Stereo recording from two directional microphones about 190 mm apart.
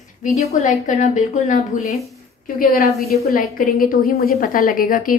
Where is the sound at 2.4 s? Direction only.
50° left (ahead or behind).